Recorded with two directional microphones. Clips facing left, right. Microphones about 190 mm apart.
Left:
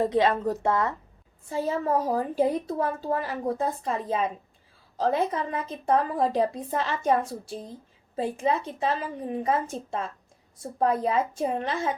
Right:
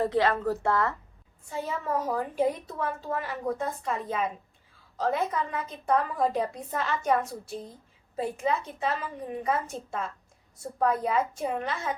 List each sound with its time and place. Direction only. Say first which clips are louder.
0.0 s a woman's voice: left 2 dB; 20° left (ahead or behind)
1.5 s a woman's voice: left 5 dB; 30° left (ahead or behind)